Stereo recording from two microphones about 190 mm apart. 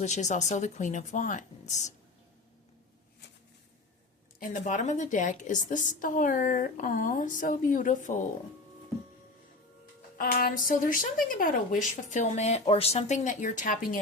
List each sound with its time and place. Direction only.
0.0 s speech: 40° left (ahead or behind)
4.4 s a woman's voice: 40° left (ahead or behind)
10.2 s speech: 50° left (ahead or behind)